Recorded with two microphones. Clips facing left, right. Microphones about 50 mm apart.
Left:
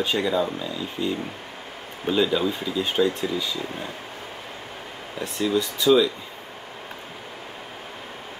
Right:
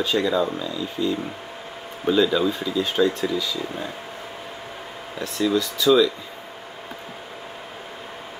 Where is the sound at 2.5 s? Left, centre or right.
Left.